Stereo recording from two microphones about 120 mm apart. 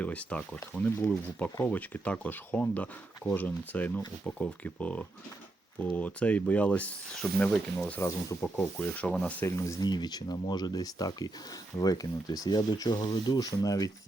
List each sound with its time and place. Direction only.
0.0 s speech: 10° left (ahead or behind)
9.5 s speech: 25° left (ahead or behind)